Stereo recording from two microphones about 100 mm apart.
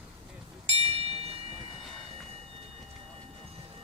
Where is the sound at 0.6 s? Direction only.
90° right.